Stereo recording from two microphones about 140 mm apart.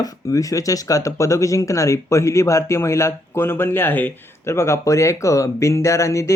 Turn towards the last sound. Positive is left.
turn(degrees=20)  # may be behind; listen again after turning